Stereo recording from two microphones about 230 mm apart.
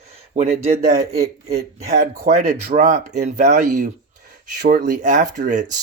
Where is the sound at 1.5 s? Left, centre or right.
Right.